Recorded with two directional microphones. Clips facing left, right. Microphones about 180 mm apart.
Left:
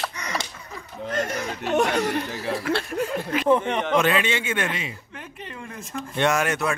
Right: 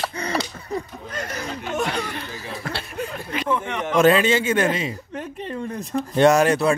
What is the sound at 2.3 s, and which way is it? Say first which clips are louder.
Chuckle: left 6 dB; 75° left (ahead or behind).